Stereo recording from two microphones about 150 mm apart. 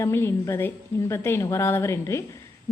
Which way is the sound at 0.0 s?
15° left (ahead or behind).